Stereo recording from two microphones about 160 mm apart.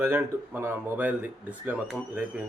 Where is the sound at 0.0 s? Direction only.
15° right (ahead or behind).